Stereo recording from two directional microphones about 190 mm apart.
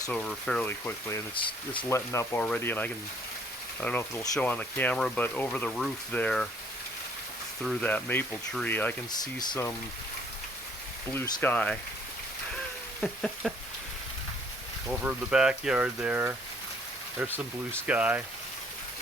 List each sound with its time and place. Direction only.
0.1 s speech: 5° left (ahead or behind)
1.4 s speech: 25° left (ahead or behind)
1.9 s speech: 10° left (ahead or behind)
7.6 s speech: 5° left (ahead or behind)
9.2 s speech: 20° left (ahead or behind)
11.1 s speech: 10° left (ahead or behind)
13.0 s a sound: 5° left (ahead or behind)
14.8 s speech: 5° right (ahead or behind)